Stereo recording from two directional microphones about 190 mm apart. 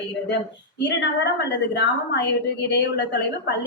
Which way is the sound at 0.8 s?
65° left (ahead or behind).